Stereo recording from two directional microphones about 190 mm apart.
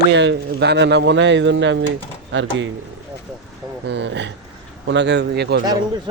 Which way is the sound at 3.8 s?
65° right (ahead or behind).